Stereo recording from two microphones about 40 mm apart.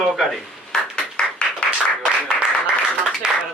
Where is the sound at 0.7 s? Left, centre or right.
Centre.